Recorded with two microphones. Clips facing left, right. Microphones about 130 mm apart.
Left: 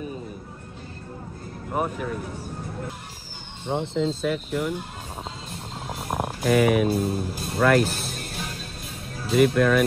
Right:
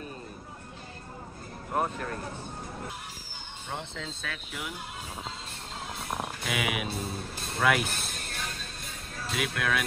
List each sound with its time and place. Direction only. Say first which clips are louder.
1.7 s speech: left 3 dB; 5° left (ahead or behind)
4.1 s speech: left 14 dB; centre (ahead or behind)
6.0 s a sound: left 7 dB; 55° left (ahead or behind)
6.4 s speech: left 15 dB; centre (ahead or behind)